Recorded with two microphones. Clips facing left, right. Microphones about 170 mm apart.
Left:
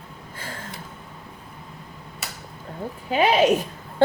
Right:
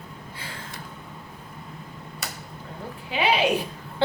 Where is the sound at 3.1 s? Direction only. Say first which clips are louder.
Left 4 dB; 45° left (ahead or behind).